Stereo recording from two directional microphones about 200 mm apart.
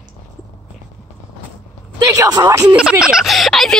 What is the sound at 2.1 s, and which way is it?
Speech, 20° right (ahead or behind).